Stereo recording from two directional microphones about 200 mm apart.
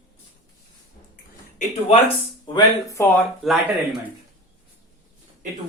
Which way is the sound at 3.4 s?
Centre (ahead or behind).